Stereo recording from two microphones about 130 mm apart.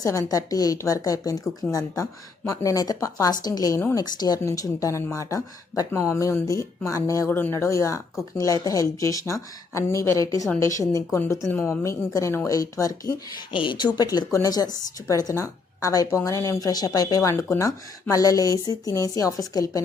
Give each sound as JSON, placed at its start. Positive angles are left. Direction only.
{"t": 0.0, "sound": "speech", "side_deg": 25}
{"t": 2.5, "sound": "speech", "side_deg": 25}